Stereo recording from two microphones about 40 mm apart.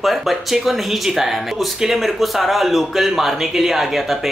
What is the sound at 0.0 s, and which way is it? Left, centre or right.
Speech, centre.